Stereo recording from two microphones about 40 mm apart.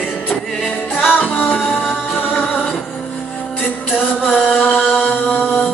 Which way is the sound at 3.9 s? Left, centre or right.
Left.